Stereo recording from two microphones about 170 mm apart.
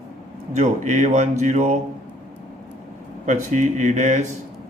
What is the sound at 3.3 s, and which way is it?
Speech, 45° right (ahead or behind).